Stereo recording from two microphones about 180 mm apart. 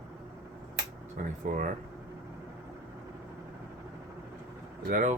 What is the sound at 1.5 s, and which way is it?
Speech, 45° right (ahead or behind).